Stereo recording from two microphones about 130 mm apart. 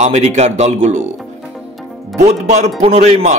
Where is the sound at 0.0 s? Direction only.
60° right (ahead or behind).